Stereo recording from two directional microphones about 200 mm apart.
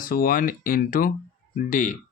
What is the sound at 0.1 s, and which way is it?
Speech, 45° left (ahead or behind).